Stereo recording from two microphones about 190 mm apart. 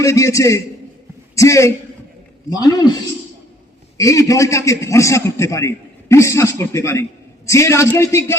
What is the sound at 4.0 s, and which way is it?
A man's voice, 15° left (ahead or behind).